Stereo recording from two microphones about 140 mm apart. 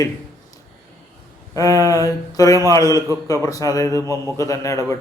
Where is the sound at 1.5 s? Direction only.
25° left (ahead or behind).